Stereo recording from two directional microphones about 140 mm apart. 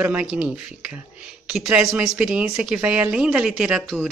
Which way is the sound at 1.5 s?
5° right (ahead or behind).